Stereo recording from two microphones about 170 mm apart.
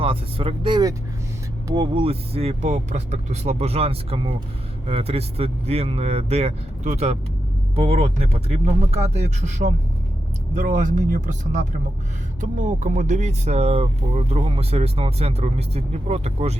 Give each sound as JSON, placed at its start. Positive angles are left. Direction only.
{"t": 0.0, "sound": "speech", "side_deg": -30}
{"t": 12.4, "sound": "speech", "side_deg": -50}